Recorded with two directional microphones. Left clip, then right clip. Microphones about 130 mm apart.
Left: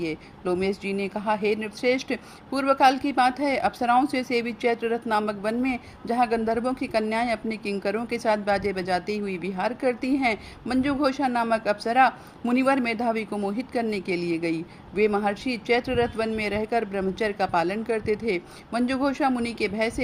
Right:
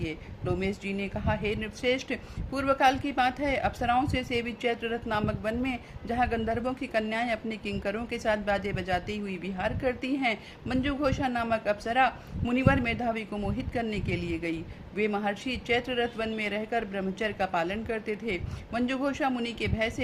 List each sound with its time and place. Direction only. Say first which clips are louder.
0.0 s speech: left 6 dB; 35° left (ahead or behind)